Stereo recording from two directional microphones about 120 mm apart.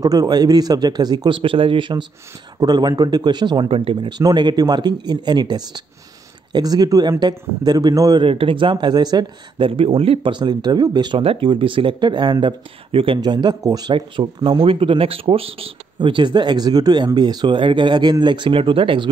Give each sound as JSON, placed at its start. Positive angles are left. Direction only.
{"t": 0.0, "sound": "speech", "side_deg": -30}
{"t": 4.2, "sound": "speech", "side_deg": -35}
{"t": 8.2, "sound": "speech", "side_deg": -50}
{"t": 9.7, "sound": "speech", "side_deg": -50}
{"t": 13.2, "sound": "speech", "side_deg": -40}